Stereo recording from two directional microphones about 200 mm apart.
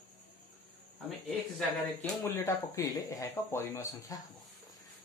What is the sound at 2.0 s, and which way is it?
Speech, 15° left (ahead or behind).